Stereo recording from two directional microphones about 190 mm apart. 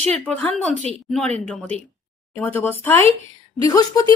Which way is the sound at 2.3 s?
10° left (ahead or behind).